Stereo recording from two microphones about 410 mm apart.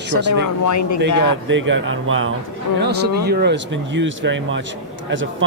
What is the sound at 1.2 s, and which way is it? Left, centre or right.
A man's voice, right.